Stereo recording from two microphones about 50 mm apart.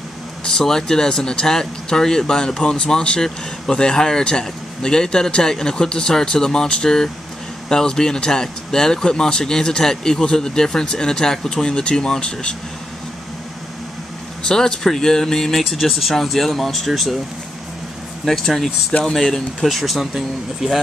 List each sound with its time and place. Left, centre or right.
0.5 s speech: centre
14.5 s speech: centre
18.2 s speech: centre